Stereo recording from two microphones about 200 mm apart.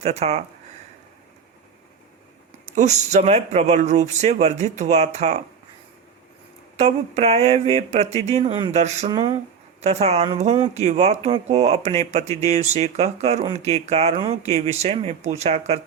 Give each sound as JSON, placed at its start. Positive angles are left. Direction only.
{"t": 0.0, "sound": "speech", "side_deg": -35}
{"t": 2.7, "sound": "speech", "side_deg": -35}
{"t": 6.7, "sound": "speech", "side_deg": -35}
{"t": 9.0, "sound": "speech", "side_deg": -25}